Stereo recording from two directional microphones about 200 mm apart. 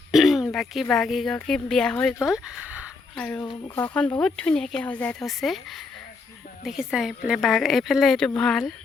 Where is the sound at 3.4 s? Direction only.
20° left (ahead or behind).